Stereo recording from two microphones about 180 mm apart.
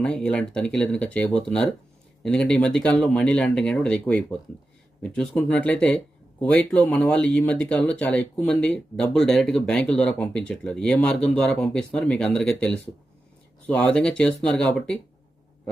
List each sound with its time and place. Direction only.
0.0 s speech: 5° left (ahead or behind)